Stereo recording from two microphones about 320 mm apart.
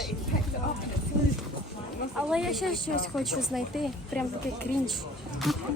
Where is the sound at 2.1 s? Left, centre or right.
Centre.